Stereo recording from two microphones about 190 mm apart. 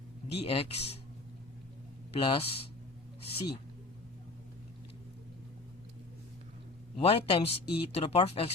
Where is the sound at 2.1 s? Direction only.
30° left (ahead or behind).